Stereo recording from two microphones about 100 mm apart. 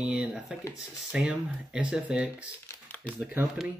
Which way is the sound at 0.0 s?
15° right (ahead or behind).